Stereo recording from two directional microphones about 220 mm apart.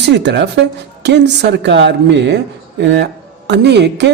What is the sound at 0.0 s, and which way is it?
Speech, 50° right (ahead or behind).